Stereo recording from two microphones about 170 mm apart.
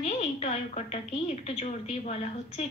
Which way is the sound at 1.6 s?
40° left (ahead or behind).